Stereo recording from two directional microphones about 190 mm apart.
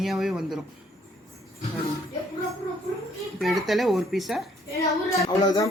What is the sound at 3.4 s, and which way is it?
Speech, centre (ahead or behind).